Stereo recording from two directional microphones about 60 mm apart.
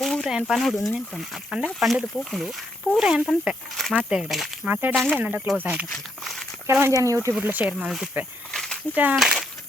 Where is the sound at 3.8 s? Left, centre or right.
Centre.